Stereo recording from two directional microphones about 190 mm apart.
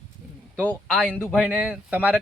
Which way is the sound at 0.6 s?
10° left (ahead or behind).